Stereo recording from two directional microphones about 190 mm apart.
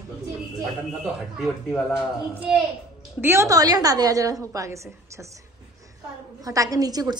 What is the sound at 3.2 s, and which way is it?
A woman's voice, 15° right (ahead or behind).